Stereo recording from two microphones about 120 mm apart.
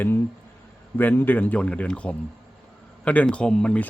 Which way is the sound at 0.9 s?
15° left (ahead or behind).